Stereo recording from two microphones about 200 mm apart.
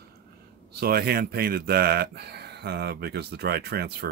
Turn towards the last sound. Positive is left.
turn(degrees=-55)  # may be behind; listen again after turning